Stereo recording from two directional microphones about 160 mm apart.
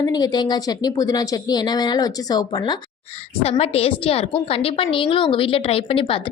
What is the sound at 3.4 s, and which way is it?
A woman's voice, 40° left (ahead or behind).